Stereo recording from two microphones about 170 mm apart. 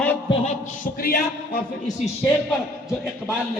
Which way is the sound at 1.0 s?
65° left (ahead or behind).